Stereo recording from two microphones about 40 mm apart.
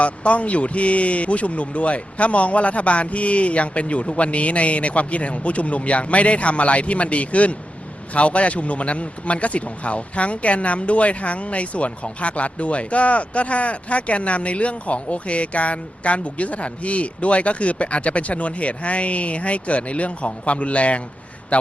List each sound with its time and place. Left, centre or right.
0.0 s a man's voice: left